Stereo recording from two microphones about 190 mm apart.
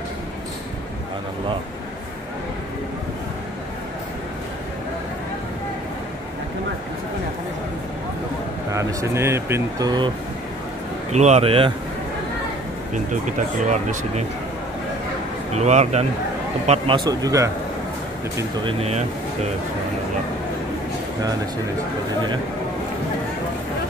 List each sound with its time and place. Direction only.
8.7 s speech: 15° right (ahead or behind)
11.1 s speech: 35° right (ahead or behind)
12.9 s speech: 40° right (ahead or behind)
15.5 s speech: 35° right (ahead or behind); by 17.5 s 20° right (ahead or behind)
18.6 s speech: 30° right (ahead or behind)